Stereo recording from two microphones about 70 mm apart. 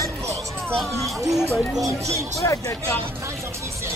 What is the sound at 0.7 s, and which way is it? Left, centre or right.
Speech, centre.